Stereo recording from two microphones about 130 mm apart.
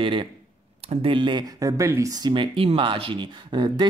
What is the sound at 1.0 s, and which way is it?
Speech, 40° right (ahead or behind).